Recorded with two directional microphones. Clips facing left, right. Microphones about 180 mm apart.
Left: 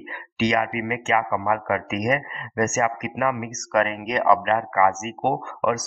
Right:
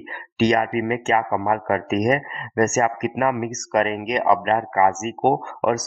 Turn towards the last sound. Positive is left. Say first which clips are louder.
# right 3 dB
turn(degrees=-40)  # may be behind; listen again after turning